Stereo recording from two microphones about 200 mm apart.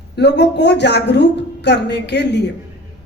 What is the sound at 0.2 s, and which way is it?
A woman's voice, 60° left (ahead or behind).